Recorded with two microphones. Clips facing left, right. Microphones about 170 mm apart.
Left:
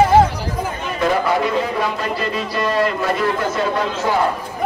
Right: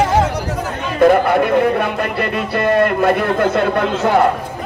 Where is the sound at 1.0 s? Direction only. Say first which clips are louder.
Right 7 dB; 55° right (ahead or behind).